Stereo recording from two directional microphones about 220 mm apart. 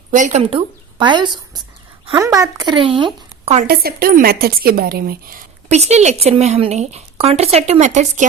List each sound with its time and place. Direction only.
0.1 s a woman's voice: 35° right (ahead or behind)
3.7 s a woman's voice: 45° right (ahead or behind)